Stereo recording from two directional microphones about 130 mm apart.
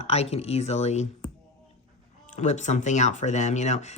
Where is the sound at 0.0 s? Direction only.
55° left (ahead or behind).